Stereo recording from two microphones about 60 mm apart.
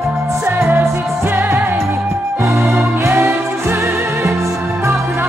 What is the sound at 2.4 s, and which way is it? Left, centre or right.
Music, right.